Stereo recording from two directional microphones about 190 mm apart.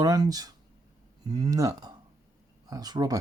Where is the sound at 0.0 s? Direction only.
20° right (ahead or behind).